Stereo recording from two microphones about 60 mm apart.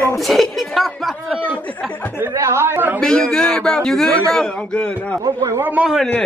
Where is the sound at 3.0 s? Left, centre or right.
Centre.